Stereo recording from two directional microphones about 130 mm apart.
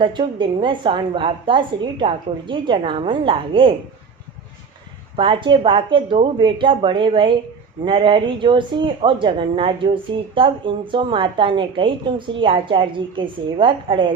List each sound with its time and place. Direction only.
0.0 s speech: 40° right (ahead or behind)
5.1 s speech: 40° right (ahead or behind)